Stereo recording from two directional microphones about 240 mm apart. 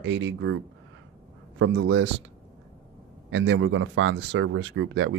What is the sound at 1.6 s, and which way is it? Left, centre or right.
Speech, right.